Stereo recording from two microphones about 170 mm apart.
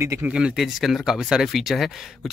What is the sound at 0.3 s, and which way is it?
Speech, 5° right (ahead or behind).